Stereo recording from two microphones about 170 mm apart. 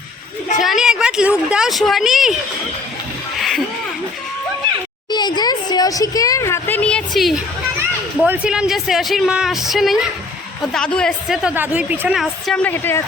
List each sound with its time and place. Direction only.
0.6 s a woman's voice: centre (ahead or behind)
3.3 s a sound: centre (ahead or behind)
5.1 s a woman's voice: 25° left (ahead or behind); by 7.3 s centre (ahead or behind)
7.8 s a woman's voice: 10° right (ahead or behind); by 13.0 s 10° left (ahead or behind)